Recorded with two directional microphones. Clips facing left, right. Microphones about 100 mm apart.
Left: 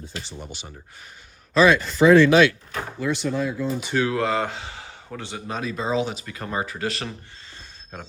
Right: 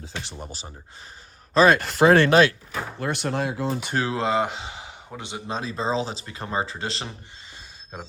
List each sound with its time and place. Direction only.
0.0 s speech: 70° right (ahead or behind)
0.4 s speech: 35° right (ahead or behind)
1.8 s speech: 65° right (ahead or behind)
2.3 s speech: 35° right (ahead or behind)
3.0 s speech: 60° right (ahead or behind)
3.9 s speech: 25° right (ahead or behind)